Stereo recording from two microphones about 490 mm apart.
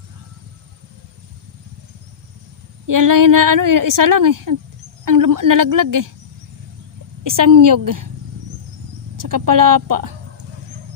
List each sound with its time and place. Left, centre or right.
2.8 s a woman's voice: right
7.3 s a woman's voice: right
9.1 s a woman's voice: right